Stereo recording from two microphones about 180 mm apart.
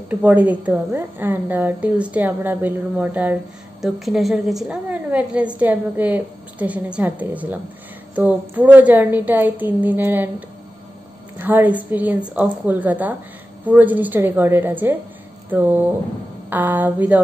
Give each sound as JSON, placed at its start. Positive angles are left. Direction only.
{"t": 0.1, "sound": "a woman's voice", "side_deg": -10}
{"t": 11.3, "sound": "a woman's voice", "side_deg": -10}